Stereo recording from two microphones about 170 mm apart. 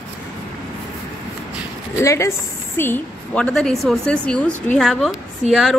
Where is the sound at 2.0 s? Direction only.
15° left (ahead or behind).